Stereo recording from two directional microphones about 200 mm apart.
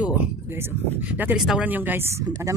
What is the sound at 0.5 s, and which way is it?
Speech, 10° right (ahead or behind).